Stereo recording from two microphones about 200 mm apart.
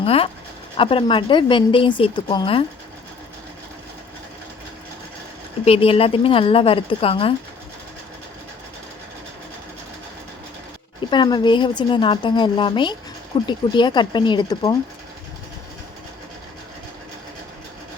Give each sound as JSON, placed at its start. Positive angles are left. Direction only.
{"t": 0.0, "sound": "a woman's voice", "side_deg": 30}
{"t": 5.6, "sound": "a woman's voice", "side_deg": 30}
{"t": 11.1, "sound": "a woman's voice", "side_deg": 20}